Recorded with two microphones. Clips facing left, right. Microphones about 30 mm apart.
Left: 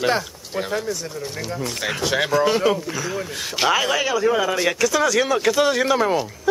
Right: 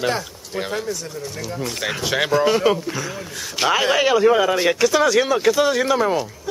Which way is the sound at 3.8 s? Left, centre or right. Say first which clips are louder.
Right 4 dB; right.